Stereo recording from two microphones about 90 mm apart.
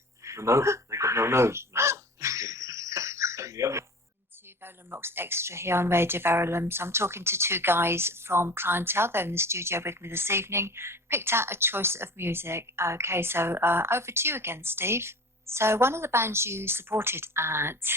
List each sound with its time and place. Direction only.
0.3 s crow: 35° right (ahead or behind)
4.6 s speech: 25° right (ahead or behind)